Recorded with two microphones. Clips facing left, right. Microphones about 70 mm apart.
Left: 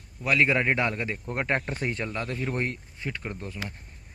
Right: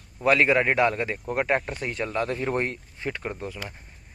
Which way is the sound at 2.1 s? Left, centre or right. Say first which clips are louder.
Right 5 dB; right.